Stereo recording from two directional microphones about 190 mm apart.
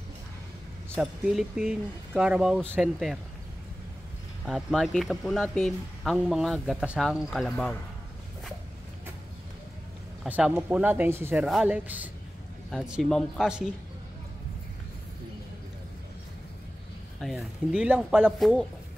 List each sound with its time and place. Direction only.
0.9 s speech: 5° right (ahead or behind)
4.5 s speech: centre (ahead or behind)
10.2 s speech: 10° right (ahead or behind)
17.2 s speech: centre (ahead or behind)